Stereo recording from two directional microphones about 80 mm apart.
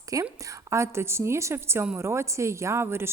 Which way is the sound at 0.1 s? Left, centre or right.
Right.